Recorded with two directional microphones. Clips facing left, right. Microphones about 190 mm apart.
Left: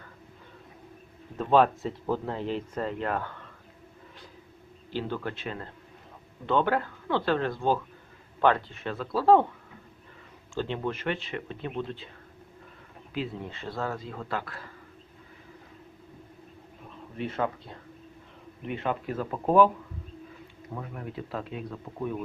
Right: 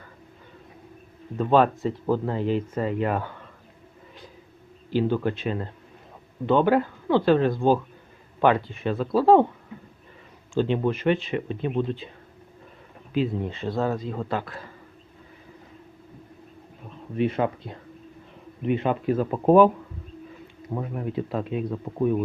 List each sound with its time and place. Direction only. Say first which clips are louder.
1.4 s speech: right 3 dB; centre (ahead or behind)
4.9 s speech: right 9 dB; 15° right (ahead or behind)
10.5 s speech: right 8 dB; 15° right (ahead or behind)
13.1 s speech: right 8 dB; 20° right (ahead or behind)
17.2 s speech: right 7 dB; 15° right (ahead or behind)
20.7 s speech: right 8 dB; 25° right (ahead or behind)